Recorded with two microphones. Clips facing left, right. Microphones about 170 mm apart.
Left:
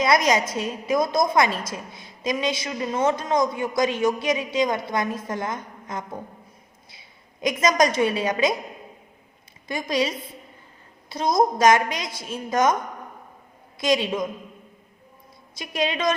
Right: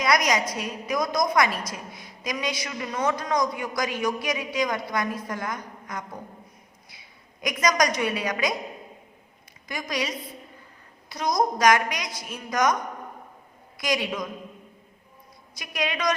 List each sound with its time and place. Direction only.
0.0 s a woman's voice: 25° left (ahead or behind)
7.4 s a woman's voice: 25° left (ahead or behind)
9.6 s a woman's voice: 25° left (ahead or behind)
13.7 s a woman's voice: 25° left (ahead or behind)
15.5 s a woman's voice: 25° left (ahead or behind)